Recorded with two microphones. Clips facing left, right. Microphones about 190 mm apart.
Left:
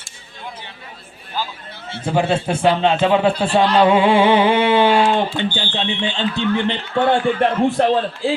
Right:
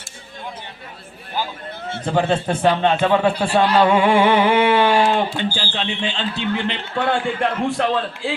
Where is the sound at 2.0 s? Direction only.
10° left (ahead or behind).